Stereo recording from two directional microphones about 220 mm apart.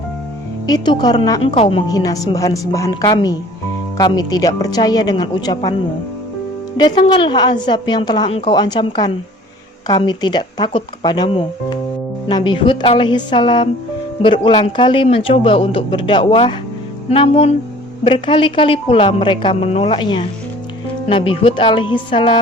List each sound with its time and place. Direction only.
0.7 s a woman's voice: 20° left (ahead or behind)
6.7 s a woman's voice: 20° left (ahead or behind)